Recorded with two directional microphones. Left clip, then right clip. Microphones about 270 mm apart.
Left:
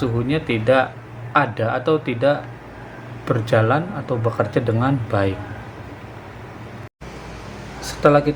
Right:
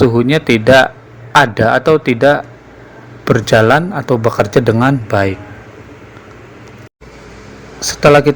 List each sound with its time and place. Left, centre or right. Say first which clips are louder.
0.2 s a man's voice: right 10 dB; right
7.8 s speech: right 7 dB; right